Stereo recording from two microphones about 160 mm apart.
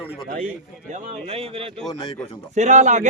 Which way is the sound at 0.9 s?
40° right (ahead or behind).